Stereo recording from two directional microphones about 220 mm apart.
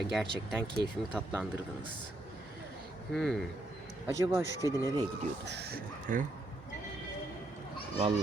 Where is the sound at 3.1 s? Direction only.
Centre (ahead or behind).